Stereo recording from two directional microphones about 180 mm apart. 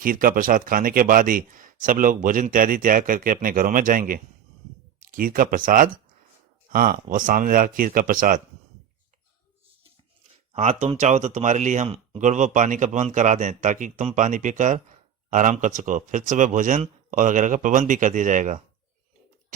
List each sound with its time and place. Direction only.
0.0 s speech: 50° right (ahead or behind)
10.5 s speech: 40° right (ahead or behind)